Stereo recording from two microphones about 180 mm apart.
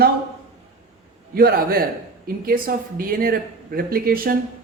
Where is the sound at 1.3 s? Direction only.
55° right (ahead or behind).